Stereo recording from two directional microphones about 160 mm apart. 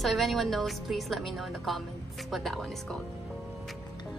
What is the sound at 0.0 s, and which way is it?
A woman's voice, centre (ahead or behind).